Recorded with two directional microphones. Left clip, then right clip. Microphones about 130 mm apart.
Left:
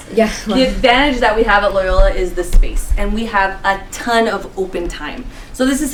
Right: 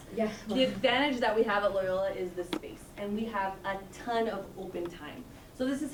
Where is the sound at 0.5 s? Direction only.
40° left (ahead or behind).